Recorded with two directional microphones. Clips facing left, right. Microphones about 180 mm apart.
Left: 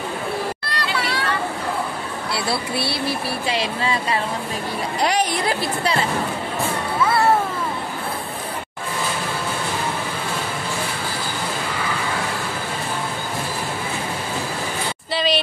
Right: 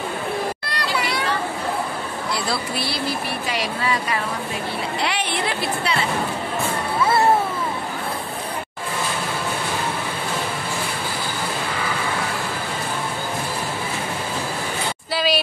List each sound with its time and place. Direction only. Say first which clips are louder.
0.7 s a sound: even; 15° right (ahead or behind)
2.4 s speech: left 2 dB; 25° left (ahead or behind)
5.0 s speech: left 6 dB; 40° left (ahead or behind)
15.1 s a woman's voice: even; 5° right (ahead or behind)